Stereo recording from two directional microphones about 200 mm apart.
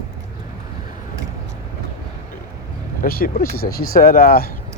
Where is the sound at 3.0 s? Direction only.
50° left (ahead or behind).